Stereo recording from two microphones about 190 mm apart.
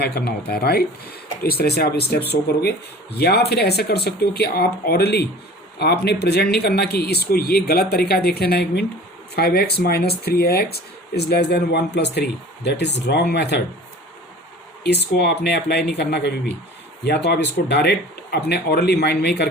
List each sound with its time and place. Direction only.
0.0 s speech: 60° left (ahead or behind)
14.8 s speech: 60° left (ahead or behind)